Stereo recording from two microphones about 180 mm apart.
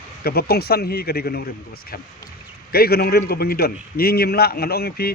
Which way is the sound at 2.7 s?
60° left (ahead or behind).